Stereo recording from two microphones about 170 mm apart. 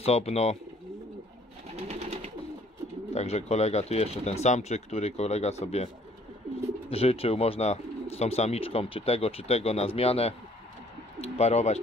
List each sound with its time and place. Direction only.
0.0 s speech: 35° left (ahead or behind)
1.8 s bird: 40° right (ahead or behind)
3.2 s speech: 40° left (ahead or behind)
6.9 s speech: 35° left (ahead or behind)